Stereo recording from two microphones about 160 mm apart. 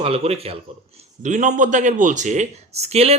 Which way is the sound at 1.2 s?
50° right (ahead or behind).